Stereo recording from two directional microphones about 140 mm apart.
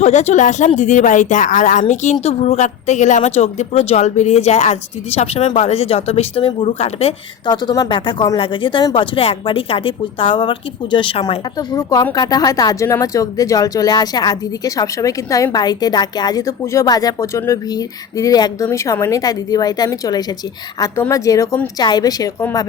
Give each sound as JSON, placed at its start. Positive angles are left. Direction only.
{"t": 0.0, "sound": "a woman's voice", "side_deg": 55}
{"t": 7.4, "sound": "speech", "side_deg": 30}